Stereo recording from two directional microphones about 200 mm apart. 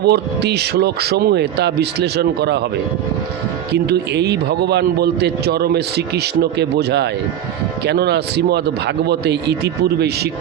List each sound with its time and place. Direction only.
0.0 s a man's voice: 55° right (ahead or behind)
3.8 s a man's voice: 55° right (ahead or behind)